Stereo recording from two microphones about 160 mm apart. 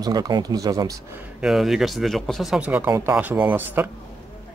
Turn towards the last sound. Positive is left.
turn(degrees=-10)  # may be behind; listen again after turning